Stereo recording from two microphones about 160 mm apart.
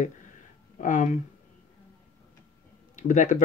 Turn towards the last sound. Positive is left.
turn(degrees=50)  # may be behind; listen again after turning